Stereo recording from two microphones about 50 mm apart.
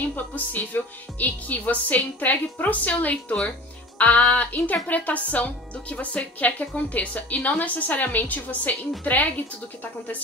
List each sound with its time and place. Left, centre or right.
0.0 s speech: left